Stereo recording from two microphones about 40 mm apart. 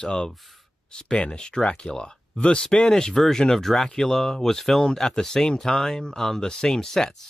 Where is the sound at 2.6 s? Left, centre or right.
Centre.